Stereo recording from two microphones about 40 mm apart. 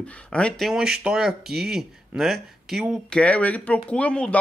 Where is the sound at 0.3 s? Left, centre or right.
Left.